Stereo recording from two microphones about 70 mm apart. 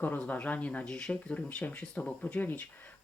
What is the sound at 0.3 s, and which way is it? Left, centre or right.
Speech, left.